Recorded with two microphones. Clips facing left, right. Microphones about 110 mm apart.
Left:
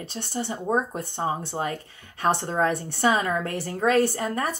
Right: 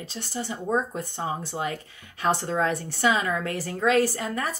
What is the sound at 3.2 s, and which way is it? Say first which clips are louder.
Speech: left 1 dB; 35° left (ahead or behind).